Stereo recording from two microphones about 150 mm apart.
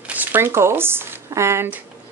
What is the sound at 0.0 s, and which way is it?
Speech, 10° right (ahead or behind).